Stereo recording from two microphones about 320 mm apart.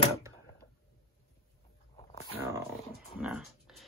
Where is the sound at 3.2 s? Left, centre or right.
Centre.